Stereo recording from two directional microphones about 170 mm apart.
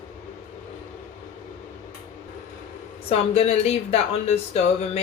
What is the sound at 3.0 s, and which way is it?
Speech, 35° left (ahead or behind).